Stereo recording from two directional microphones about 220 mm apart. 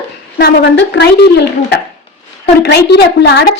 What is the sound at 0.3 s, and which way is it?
A woman's voice, 50° left (ahead or behind).